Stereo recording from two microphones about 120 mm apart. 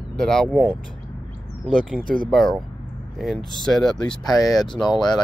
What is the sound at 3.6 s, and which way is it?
Speech, 5° left (ahead or behind).